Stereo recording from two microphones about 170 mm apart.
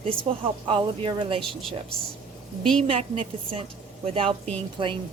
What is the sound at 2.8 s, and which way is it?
Speech, 35° right (ahead or behind).